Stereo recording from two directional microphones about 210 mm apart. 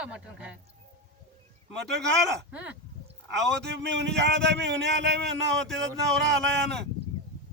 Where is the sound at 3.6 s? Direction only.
55° right (ahead or behind).